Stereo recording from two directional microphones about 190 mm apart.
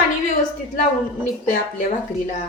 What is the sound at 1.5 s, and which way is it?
Speech, 45° left (ahead or behind).